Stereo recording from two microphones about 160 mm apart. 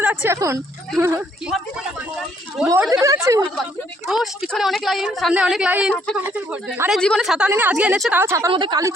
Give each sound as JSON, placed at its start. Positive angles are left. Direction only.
{"t": 0.0, "sound": "a woman's voice", "side_deg": -10}
{"t": 2.6, "sound": "a woman's voice", "side_deg": -5}
{"t": 2.9, "sound": "speech", "side_deg": -20}
{"t": 4.1, "sound": "a woman's voice", "side_deg": 0}
{"t": 6.9, "sound": "a woman's voice", "side_deg": 0}
{"t": 8.2, "sound": "a woman's voice", "side_deg": -15}
{"t": 8.5, "sound": "speech", "side_deg": -25}